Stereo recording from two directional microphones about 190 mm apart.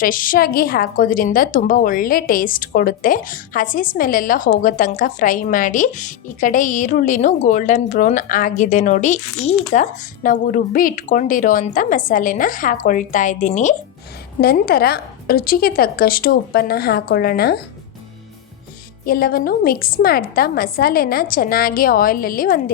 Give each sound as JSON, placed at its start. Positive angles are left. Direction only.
{"t": 0.0, "sound": "a woman's voice", "side_deg": 45}
{"t": 14.4, "sound": "a woman's voice", "side_deg": 55}
{"t": 19.0, "sound": "a woman's voice", "side_deg": 50}